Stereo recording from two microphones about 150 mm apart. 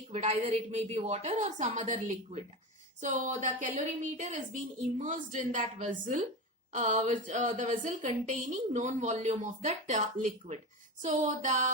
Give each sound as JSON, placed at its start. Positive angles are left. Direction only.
{"t": 0.1, "sound": "a woman's voice", "side_deg": -45}